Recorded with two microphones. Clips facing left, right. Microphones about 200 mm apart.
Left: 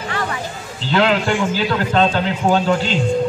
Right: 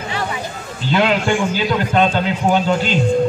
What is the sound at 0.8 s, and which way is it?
A man's voice, 15° right (ahead or behind).